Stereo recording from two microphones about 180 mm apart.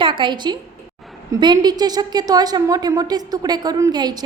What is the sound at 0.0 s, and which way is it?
A woman's voice, 25° right (ahead or behind).